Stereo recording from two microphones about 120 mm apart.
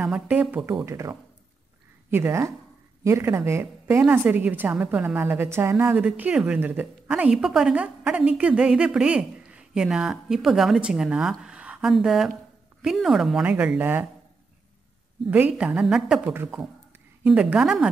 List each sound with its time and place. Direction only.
0.0 s a woman's voice: 10° right (ahead or behind)
0.8 s a woman's voice: 25° right (ahead or behind)
6.0 s a woman's voice: 10° right (ahead or behind)
15.3 s a woman's voice: 10° right (ahead or behind)
16.3 s a woman's voice: 20° right (ahead or behind); by 17.8 s 5° right (ahead or behind)